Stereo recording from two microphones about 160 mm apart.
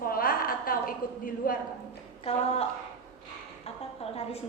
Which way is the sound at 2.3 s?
40° left (ahead or behind).